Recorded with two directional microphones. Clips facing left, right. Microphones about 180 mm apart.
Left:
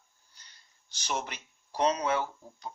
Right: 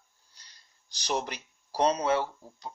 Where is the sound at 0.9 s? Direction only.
35° right (ahead or behind).